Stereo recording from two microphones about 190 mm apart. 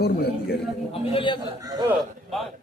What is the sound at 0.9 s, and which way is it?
Speech, 30° left (ahead or behind).